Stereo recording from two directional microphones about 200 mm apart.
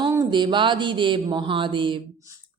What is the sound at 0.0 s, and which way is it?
A woman's voice, 20° right (ahead or behind).